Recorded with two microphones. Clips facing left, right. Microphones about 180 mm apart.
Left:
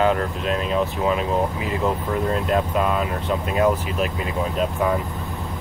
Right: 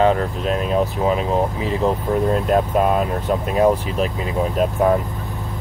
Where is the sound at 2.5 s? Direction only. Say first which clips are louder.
Right 4 dB; 45° right (ahead or behind).